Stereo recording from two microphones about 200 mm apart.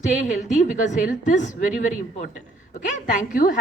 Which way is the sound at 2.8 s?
40° left (ahead or behind).